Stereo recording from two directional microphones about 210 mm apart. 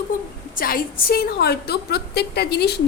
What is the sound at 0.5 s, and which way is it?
A woman's voice, 45° left (ahead or behind).